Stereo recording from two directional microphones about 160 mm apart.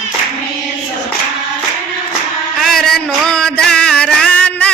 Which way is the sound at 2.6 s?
Centre (ahead or behind).